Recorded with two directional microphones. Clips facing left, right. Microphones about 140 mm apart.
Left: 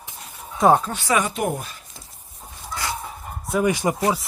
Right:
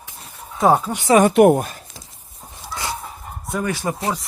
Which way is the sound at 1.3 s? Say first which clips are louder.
Right 13 dB; 65° right (ahead or behind).